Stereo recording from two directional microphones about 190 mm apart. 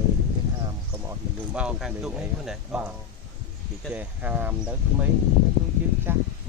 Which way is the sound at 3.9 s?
10° right (ahead or behind).